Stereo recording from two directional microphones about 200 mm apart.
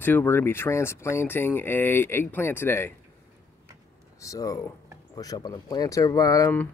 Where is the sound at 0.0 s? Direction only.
10° left (ahead or behind).